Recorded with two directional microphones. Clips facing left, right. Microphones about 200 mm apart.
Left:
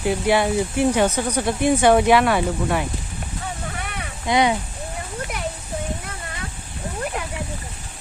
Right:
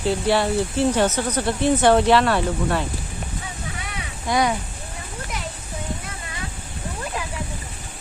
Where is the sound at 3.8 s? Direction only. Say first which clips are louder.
Left 2 dB; 55° left (ahead or behind).